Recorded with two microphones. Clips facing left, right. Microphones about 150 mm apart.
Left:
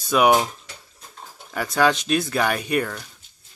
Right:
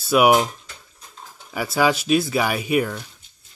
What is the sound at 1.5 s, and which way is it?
Speech, 5° right (ahead or behind).